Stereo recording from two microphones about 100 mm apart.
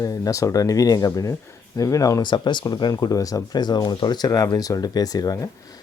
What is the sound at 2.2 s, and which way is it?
Speech, 50° left (ahead or behind).